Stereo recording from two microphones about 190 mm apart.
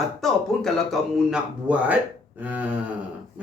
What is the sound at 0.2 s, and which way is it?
Speech, centre (ahead or behind).